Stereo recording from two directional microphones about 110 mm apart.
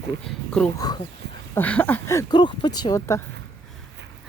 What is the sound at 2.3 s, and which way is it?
Speech, 40° left (ahead or behind).